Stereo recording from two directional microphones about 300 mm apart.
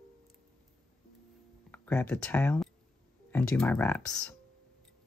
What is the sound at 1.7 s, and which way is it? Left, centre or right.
Speech, centre.